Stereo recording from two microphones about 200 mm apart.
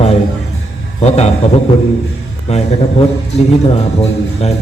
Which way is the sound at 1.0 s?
30° left (ahead or behind).